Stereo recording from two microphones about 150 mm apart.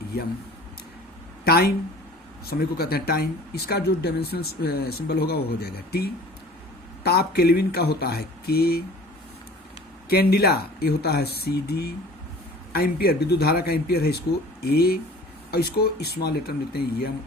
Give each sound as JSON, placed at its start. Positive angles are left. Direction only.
{"t": 1.5, "sound": "speech", "side_deg": 90}
{"t": 10.1, "sound": "speech", "side_deg": 90}